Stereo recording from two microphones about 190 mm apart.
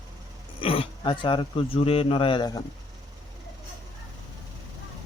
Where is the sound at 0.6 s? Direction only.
30° left (ahead or behind).